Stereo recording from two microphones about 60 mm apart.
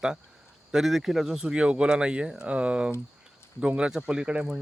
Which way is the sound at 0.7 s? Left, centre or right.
Centre.